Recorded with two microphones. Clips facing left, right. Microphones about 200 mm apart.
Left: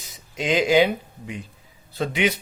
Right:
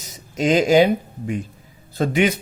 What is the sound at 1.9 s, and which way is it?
Speech, 45° right (ahead or behind).